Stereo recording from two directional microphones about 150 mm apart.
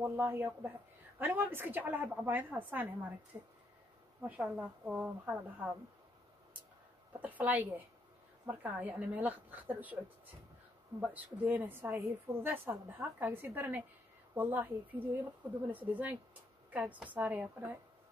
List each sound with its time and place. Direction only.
0.0 s a woman's voice: 15° right (ahead or behind)
4.4 s a woman's voice: 5° right (ahead or behind)
7.2 s a woman's voice: 10° right (ahead or behind)